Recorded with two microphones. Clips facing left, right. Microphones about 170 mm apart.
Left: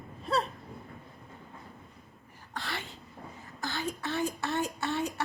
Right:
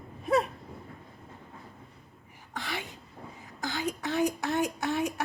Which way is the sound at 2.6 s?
15° right (ahead or behind).